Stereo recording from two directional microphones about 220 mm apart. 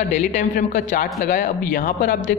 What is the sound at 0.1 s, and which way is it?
A woman's voice, 30° left (ahead or behind).